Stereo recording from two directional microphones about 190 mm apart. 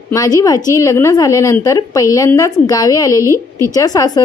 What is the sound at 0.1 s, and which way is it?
A woman's voice, 15° left (ahead or behind).